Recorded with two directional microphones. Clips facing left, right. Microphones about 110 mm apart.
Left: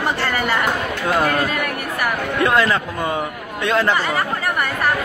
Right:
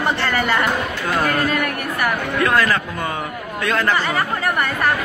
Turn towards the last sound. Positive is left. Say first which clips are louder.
# left 1 dB
turn(degrees=25)  # may be behind; listen again after turning